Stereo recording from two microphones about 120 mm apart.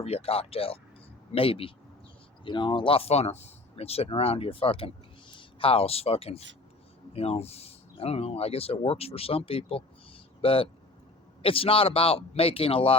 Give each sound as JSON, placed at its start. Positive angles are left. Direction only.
{"t": 0.0, "sound": "speech", "side_deg": 60}